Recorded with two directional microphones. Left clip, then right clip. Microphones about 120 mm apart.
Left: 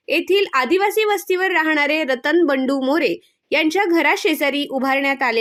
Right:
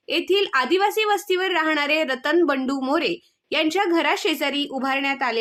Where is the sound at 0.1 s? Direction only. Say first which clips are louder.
Left 3 dB; 30° left (ahead or behind).